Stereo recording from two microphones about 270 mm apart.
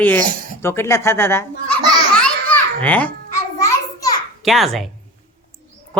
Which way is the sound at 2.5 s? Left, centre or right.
Centre.